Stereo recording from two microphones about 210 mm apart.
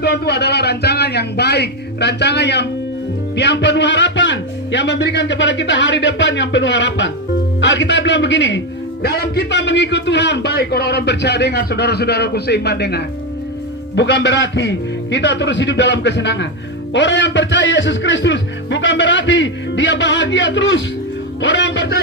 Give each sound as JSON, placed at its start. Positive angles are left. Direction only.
{"t": 0.0, "sound": "a man's voice", "side_deg": 50}